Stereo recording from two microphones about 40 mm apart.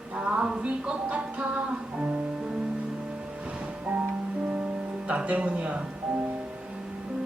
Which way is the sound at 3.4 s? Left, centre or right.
Right.